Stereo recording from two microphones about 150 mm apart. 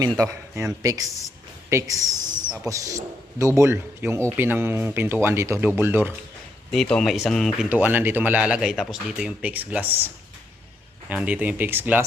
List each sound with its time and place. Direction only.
0.0 s a man's voice: 25° right (ahead or behind)
6.7 s speech: 5° left (ahead or behind)
7.7 s a man's voice: 10° right (ahead or behind)
11.1 s a man's voice: 10° right (ahead or behind)